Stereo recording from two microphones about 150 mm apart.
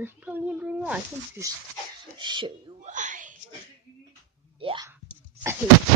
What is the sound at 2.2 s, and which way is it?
Speech, 30° right (ahead or behind).